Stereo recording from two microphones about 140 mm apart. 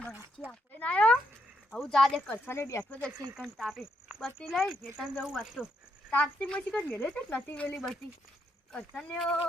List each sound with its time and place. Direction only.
0.4 s speech: 10° left (ahead or behind)
2.5 s speech: 20° left (ahead or behind)
3.3 s speech: centre (ahead or behind)
6.1 s speech: 10° left (ahead or behind)